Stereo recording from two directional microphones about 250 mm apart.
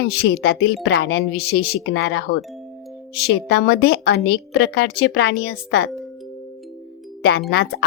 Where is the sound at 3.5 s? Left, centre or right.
Left.